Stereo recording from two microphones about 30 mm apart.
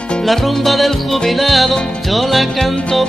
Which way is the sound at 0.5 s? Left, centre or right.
Centre.